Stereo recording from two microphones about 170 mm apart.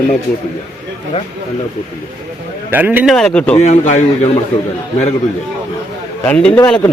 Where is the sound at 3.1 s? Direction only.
5° left (ahead or behind).